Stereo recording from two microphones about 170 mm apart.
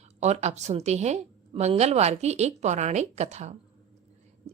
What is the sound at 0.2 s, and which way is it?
A woman's voice, 40° right (ahead or behind).